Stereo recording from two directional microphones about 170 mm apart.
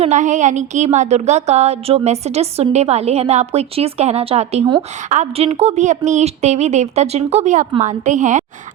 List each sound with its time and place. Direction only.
0.0 s a woman's voice: 45° right (ahead or behind)